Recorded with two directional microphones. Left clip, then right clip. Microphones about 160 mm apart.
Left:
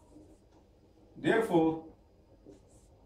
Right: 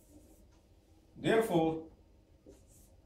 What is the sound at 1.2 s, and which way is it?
Speech, 5° right (ahead or behind).